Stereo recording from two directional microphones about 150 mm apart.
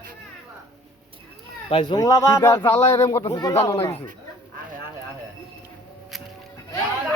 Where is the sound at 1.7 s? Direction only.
35° left (ahead or behind).